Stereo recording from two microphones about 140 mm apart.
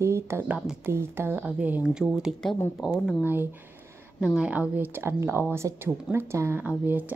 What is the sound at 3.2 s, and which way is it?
Speech, 15° right (ahead or behind).